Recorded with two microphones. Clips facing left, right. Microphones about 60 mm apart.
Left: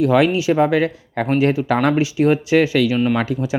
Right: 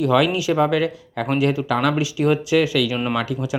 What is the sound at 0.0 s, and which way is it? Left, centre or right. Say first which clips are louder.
Speech: left 3 dB; left.